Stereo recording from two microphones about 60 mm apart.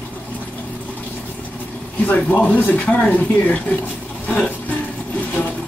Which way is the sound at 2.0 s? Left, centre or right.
Left.